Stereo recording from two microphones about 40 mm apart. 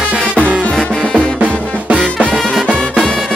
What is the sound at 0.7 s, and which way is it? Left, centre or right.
Music, centre.